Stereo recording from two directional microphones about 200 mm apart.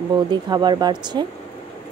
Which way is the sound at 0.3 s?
20° right (ahead or behind).